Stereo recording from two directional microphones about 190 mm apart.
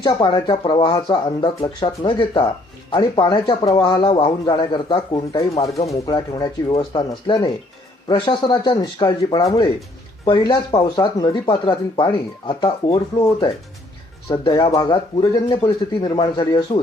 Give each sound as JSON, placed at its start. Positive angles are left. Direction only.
{"t": 0.0, "sound": "speech", "side_deg": 25}